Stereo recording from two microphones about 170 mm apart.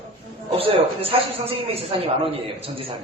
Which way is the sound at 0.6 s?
35° right (ahead or behind).